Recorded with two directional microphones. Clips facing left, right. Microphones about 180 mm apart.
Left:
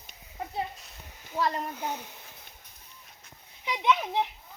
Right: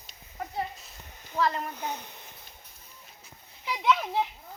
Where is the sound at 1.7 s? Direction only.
10° left (ahead or behind).